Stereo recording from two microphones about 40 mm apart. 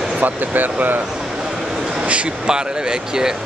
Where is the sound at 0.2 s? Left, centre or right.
Right.